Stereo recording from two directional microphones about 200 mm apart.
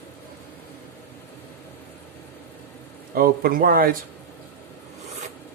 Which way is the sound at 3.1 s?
45° right (ahead or behind).